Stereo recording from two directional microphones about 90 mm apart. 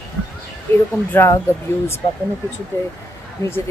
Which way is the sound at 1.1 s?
20° left (ahead or behind).